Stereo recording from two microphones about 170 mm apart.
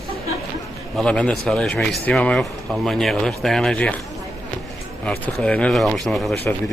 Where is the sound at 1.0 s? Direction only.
5° left (ahead or behind).